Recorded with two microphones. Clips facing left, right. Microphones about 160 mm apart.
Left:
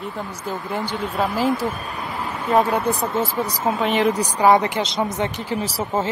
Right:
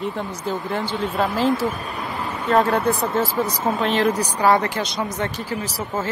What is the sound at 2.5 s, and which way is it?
Speech, 15° left (ahead or behind).